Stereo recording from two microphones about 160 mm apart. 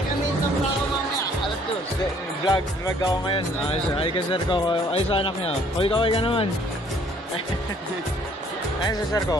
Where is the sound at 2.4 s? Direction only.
25° left (ahead or behind).